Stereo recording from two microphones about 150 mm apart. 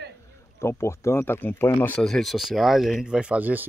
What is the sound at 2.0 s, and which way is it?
Speech, centre (ahead or behind).